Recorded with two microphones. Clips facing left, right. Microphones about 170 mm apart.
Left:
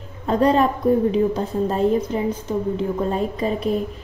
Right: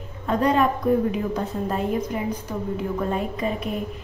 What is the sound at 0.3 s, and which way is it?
A woman's voice, 30° left (ahead or behind).